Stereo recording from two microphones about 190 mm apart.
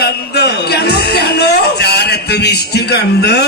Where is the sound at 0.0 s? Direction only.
60° left (ahead or behind).